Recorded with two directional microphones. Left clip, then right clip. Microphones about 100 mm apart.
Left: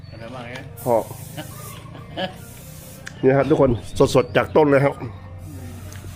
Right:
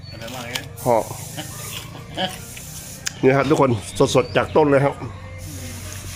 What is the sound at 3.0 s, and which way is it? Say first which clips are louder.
Speech: even; 40° right (ahead or behind).